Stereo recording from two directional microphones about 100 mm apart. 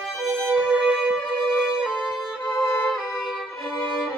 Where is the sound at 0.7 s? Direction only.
10° right (ahead or behind).